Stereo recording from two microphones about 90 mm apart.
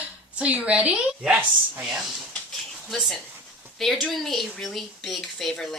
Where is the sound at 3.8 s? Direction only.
5° left (ahead or behind).